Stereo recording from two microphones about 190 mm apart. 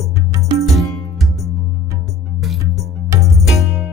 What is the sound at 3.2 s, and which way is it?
Music, centre (ahead or behind).